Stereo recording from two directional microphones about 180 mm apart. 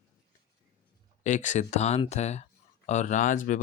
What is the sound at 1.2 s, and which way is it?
Speech, 45° left (ahead or behind).